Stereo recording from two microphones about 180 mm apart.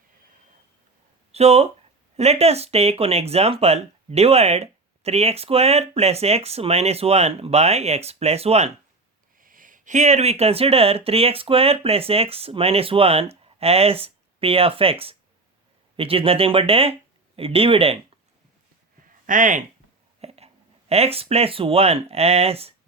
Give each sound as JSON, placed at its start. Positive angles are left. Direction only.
{"t": 1.3, "sound": "speech", "side_deg": -35}
{"t": 9.4, "sound": "speech", "side_deg": -50}
{"t": 19.2, "sound": "speech", "side_deg": -45}
{"t": 20.2, "sound": "a sound", "side_deg": -35}
{"t": 20.9, "sound": "speech", "side_deg": -35}